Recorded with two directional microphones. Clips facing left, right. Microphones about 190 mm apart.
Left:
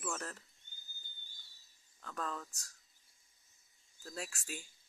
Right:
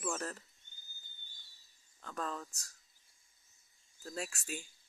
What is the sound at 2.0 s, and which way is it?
Speech, 5° right (ahead or behind).